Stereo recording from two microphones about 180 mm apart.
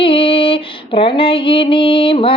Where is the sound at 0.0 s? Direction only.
30° left (ahead or behind).